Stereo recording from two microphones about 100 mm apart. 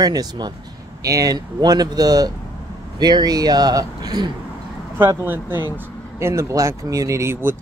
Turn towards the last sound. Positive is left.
turn(degrees=-25)  # may be behind; listen again after turning